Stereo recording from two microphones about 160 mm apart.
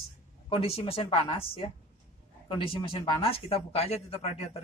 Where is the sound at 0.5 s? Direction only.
35° left (ahead or behind).